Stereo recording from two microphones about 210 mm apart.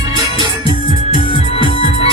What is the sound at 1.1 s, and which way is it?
Music, 25° left (ahead or behind).